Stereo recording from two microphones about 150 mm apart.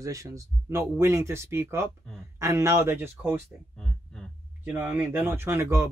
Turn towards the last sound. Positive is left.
turn(degrees=-15)  # may be behind; listen again after turning